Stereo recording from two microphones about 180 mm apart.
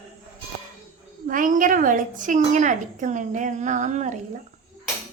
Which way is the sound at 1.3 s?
50° right (ahead or behind).